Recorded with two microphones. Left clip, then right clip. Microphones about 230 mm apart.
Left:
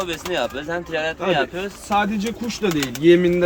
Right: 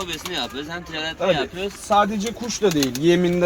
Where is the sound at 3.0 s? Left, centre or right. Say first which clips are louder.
Left 5 dB; right.